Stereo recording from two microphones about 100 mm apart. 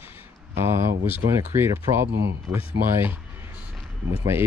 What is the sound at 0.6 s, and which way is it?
Speech, 25° right (ahead or behind).